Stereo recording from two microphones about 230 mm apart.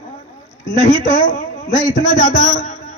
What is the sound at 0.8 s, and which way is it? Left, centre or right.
A man's voice, left.